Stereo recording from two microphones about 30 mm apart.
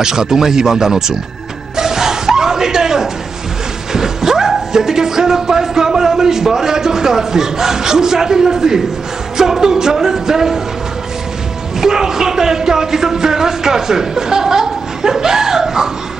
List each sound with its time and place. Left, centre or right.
0.0 s speech: centre
1.8 s chuckle: centre
3.9 s speech: centre
11.8 s speech: centre